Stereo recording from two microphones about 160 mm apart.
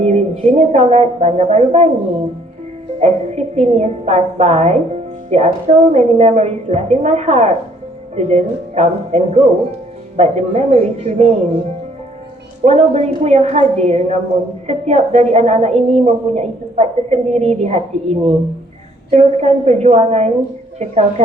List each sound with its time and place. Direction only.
0.0 s a woman's voice: 40° right (ahead or behind)
3.0 s a woman's voice: 45° right (ahead or behind)
12.6 s a woman's voice: 40° right (ahead or behind)